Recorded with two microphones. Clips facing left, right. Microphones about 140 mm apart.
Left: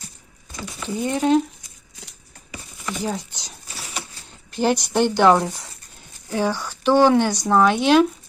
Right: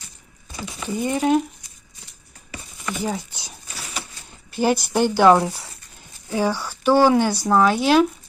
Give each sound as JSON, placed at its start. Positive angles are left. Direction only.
{"t": 0.5, "sound": "speech", "side_deg": -10}
{"t": 2.9, "sound": "speech", "side_deg": -10}
{"t": 3.8, "sound": "a sound", "side_deg": 25}
{"t": 4.5, "sound": "speech", "side_deg": -5}